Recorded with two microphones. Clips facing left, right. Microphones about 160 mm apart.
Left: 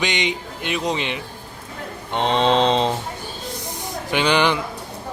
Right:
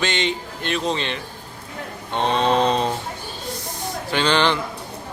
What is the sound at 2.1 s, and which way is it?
Mantra, 20° left (ahead or behind).